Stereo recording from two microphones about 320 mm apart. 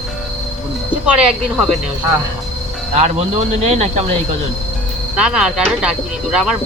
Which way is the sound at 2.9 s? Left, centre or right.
Right.